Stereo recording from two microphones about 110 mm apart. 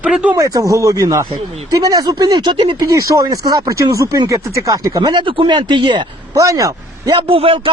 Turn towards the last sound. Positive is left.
turn(degrees=-55)  # may be behind; listen again after turning